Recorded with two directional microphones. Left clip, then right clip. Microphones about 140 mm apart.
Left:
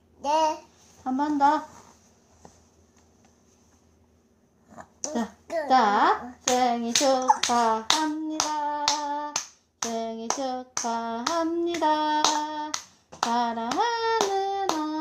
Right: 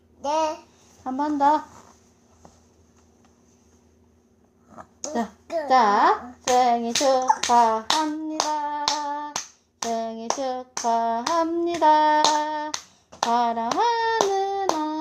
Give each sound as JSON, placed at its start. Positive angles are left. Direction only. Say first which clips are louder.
{"t": 0.2, "sound": "babbling", "louder": "even", "side_deg": 20}
{"t": 1.0, "sound": "speech", "louder": "right 2 dB", "side_deg": -30}
{"t": 4.7, "sound": "a sound", "louder": "right 1 dB", "side_deg": 10}
{"t": 5.6, "sound": "a child's voice", "louder": "right 3 dB", "side_deg": -30}
{"t": 8.5, "sound": "hands", "louder": "right 1 dB", "side_deg": -30}